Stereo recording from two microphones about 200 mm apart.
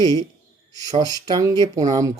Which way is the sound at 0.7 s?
20° right (ahead or behind).